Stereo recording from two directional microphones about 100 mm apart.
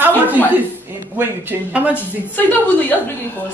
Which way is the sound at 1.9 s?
20° left (ahead or behind).